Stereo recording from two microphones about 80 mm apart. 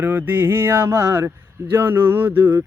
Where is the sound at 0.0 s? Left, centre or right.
Right.